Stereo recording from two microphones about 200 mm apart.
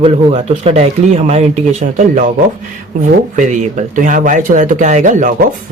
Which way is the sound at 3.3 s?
35° right (ahead or behind).